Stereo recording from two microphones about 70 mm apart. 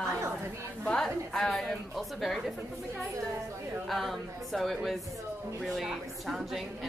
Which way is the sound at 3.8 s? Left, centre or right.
Centre.